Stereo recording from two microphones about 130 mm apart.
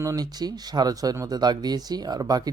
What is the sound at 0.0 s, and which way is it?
Speech, 25° right (ahead or behind).